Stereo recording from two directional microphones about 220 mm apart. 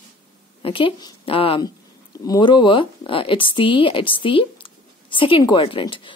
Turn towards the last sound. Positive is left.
turn(degrees=20)  # may be behind; listen again after turning